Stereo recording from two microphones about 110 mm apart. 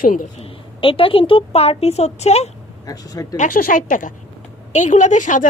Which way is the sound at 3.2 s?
30° left (ahead or behind).